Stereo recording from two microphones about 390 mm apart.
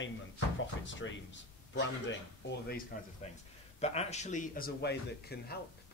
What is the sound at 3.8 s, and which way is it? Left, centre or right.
Speech, centre.